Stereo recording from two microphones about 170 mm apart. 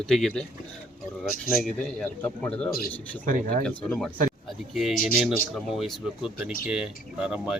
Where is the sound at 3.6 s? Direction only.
5° left (ahead or behind).